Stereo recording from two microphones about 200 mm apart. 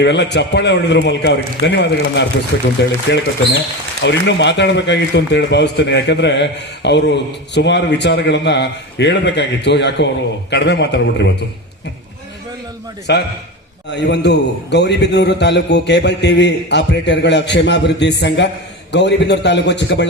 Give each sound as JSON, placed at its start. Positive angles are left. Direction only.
{"t": 0.0, "sound": "a man's voice", "side_deg": 60}
{"t": 4.0, "sound": "a man's voice", "side_deg": 60}
{"t": 13.1, "sound": "a man's voice", "side_deg": 60}